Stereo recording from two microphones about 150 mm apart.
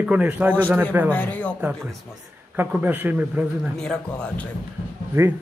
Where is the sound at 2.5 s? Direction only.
15° right (ahead or behind).